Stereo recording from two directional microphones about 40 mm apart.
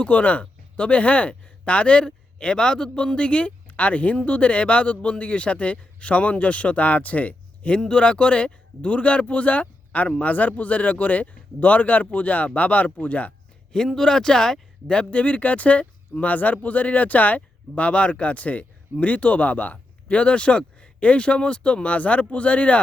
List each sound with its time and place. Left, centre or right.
0.1 s speech: left
7.9 s speech: left
13.7 s speech: centre
14.8 s speech: left